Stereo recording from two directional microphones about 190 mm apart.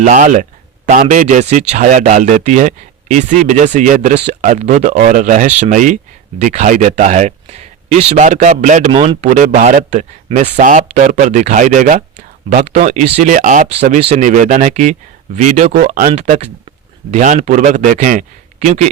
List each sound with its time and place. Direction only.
0.0 s a man's voice: 40° right (ahead or behind)